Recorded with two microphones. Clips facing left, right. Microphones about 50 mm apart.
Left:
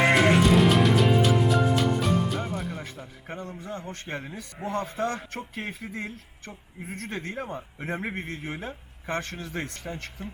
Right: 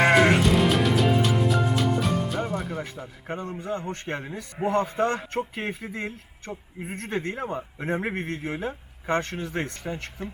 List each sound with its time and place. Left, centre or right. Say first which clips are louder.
0.0 s music: right 1 dB; centre
3.2 s a man's voice: right 5 dB; right
3.7 s a man's voice: right 5 dB; right
6.5 s speech: right 4 dB; centre
7.1 s a man's voice: right 5 dB; right